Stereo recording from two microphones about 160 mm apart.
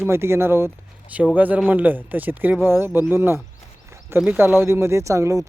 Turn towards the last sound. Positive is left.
turn(degrees=-20)  # may be behind; listen again after turning